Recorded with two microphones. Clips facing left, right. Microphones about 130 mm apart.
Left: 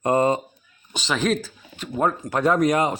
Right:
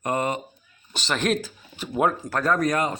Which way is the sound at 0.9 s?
5° left (ahead or behind).